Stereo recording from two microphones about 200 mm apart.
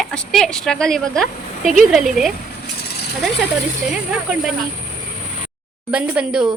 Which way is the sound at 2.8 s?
55° left (ahead or behind).